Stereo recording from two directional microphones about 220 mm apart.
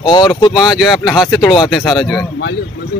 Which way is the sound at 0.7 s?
Centre (ahead or behind).